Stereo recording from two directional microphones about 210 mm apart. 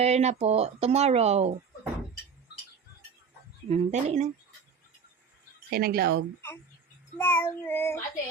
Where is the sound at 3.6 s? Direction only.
30° right (ahead or behind).